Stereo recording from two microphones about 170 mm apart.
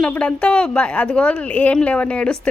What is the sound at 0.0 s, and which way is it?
A woman's voice, 5° left (ahead or behind).